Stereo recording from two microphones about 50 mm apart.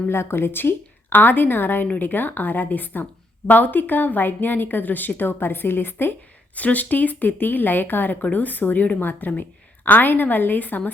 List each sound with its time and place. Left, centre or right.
0.1 s a woman's voice: left
6.6 s a woman's voice: left